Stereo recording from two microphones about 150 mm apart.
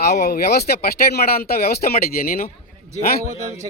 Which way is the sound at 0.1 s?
85° left.